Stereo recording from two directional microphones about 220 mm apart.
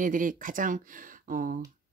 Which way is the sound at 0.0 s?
35° right (ahead or behind).